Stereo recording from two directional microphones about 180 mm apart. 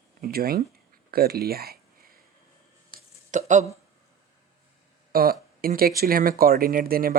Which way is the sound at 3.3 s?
40° right (ahead or behind).